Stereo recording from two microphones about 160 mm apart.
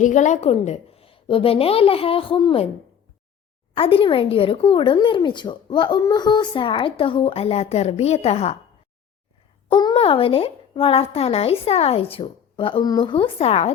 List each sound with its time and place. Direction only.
0.0 s speech: 50° left (ahead or behind); by 2.6 s 35° left (ahead or behind)
3.8 s speech: 35° left (ahead or behind)
9.6 s speech: 30° left (ahead or behind)